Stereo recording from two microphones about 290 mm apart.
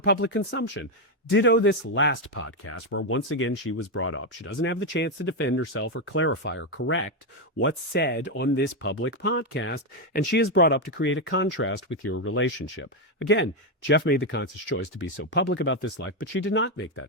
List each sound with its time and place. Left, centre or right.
0.0 s speech: left